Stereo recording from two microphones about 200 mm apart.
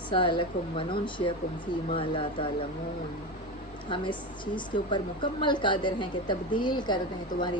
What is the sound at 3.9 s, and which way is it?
A woman's voice, 25° left (ahead or behind).